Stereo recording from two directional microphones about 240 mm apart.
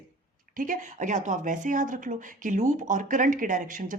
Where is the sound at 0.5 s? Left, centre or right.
Right.